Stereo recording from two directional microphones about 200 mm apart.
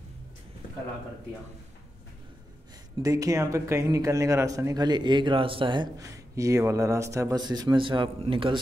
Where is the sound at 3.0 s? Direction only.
15° right (ahead or behind).